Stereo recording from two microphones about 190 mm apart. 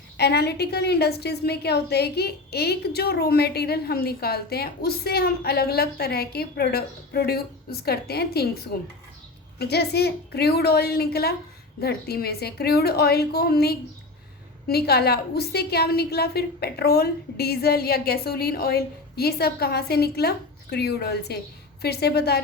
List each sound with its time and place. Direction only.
0.2 s a woman's voice: 60° left (ahead or behind)